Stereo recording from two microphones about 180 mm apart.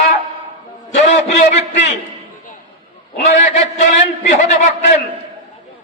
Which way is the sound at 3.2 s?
40° left (ahead or behind).